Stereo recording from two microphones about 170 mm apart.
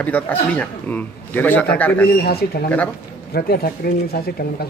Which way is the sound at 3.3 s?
65° left (ahead or behind).